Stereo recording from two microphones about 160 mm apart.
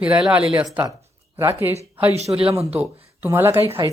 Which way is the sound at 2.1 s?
40° right (ahead or behind).